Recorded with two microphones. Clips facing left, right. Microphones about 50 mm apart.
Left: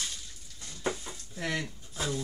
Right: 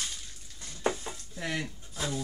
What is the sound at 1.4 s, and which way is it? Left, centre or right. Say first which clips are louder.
Speech: left 1 dB; centre.